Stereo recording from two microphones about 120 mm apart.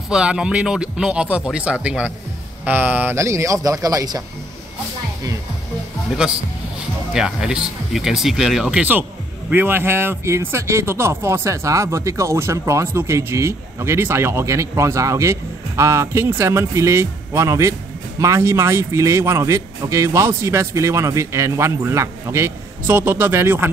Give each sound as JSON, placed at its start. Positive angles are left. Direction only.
{"t": 0.1, "sound": "speech", "side_deg": -5}
{"t": 7.2, "sound": "speech", "side_deg": -5}